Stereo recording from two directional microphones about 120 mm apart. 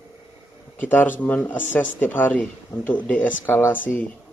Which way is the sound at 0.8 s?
15° left (ahead or behind).